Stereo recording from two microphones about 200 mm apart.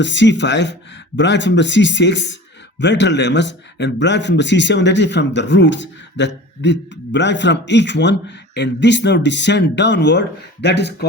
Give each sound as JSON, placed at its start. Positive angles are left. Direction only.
{"t": 0.0, "sound": "speech", "side_deg": 65}